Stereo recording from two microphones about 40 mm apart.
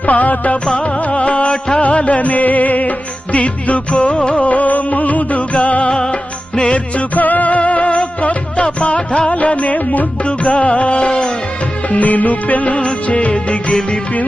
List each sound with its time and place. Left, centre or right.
0.0 s music: left
5.9 s music: left
7.2 s music: left
10.2 s music: left
11.9 s music: left